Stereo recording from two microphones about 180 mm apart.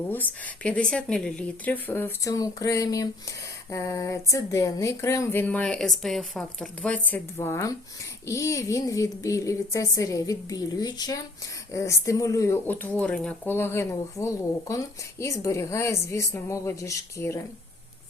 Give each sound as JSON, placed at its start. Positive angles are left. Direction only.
{"t": 0.1, "sound": "a woman's voice", "side_deg": 10}